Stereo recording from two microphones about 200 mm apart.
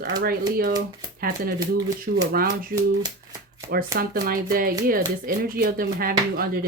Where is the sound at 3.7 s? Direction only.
50° right (ahead or behind).